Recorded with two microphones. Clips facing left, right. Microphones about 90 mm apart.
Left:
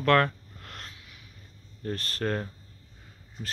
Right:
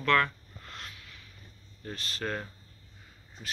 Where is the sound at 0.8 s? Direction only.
25° left (ahead or behind).